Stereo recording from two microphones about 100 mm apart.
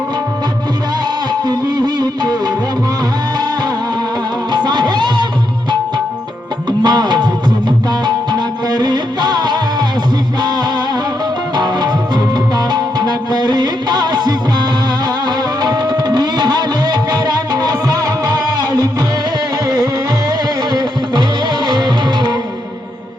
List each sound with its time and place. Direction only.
1.3 s music: 45° right (ahead or behind)
4.5 s music: 45° right (ahead or behind)
6.7 s music: 45° right (ahead or behind)
11.5 s music: 45° right (ahead or behind)
15.6 s music: 45° right (ahead or behind)
21.7 s music: 45° right (ahead or behind)